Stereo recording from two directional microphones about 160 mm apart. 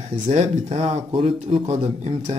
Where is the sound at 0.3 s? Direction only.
45° right (ahead or behind).